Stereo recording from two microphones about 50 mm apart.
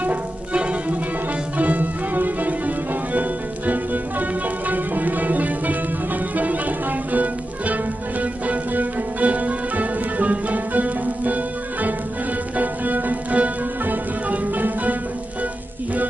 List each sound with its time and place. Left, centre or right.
0.0 s music: right
12.5 s music: right